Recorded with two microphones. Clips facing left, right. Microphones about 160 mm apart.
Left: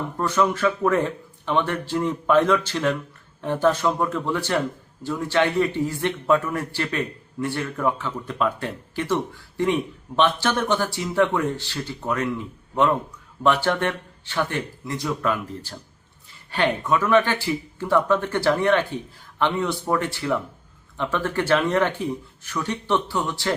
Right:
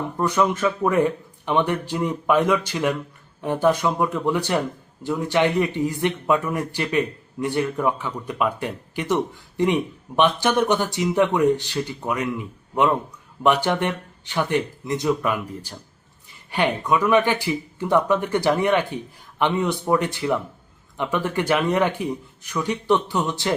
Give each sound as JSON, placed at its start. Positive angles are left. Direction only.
{"t": 0.2, "sound": "speech", "side_deg": -15}
{"t": 13.4, "sound": "speech", "side_deg": -15}